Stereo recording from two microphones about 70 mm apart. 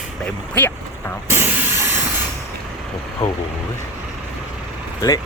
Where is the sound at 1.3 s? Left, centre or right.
Right.